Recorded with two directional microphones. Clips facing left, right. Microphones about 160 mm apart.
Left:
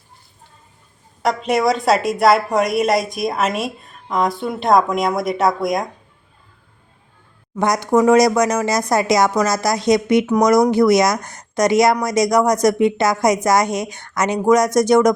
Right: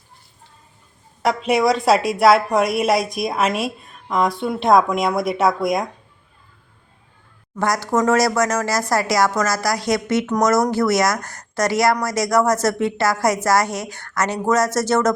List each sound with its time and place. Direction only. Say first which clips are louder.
1.2 s a woman's voice: even; centre (ahead or behind)
7.5 s speech: left 4 dB; 20° left (ahead or behind)